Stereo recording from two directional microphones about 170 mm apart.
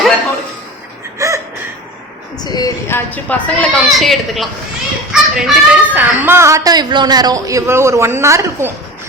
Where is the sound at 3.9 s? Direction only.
Centre (ahead or behind).